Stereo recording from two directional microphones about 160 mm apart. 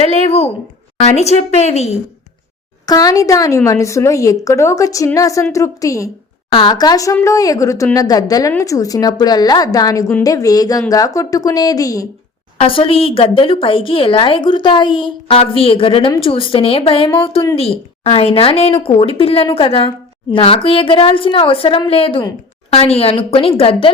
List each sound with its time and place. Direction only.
0.0 s speech: 40° left (ahead or behind)
2.8 s a woman's voice: 25° left (ahead or behind)
12.5 s speech: 35° left (ahead or behind)